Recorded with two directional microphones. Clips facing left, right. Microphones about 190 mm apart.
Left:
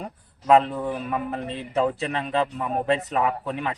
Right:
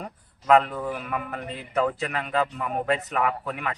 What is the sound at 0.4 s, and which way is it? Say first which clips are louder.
A man's voice: left 1 dB; 25° left (ahead or behind).